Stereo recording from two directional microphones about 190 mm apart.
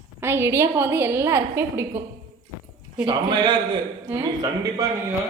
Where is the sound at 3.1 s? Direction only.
25° right (ahead or behind).